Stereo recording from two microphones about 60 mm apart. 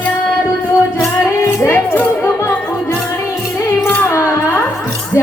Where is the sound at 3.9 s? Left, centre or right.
Left.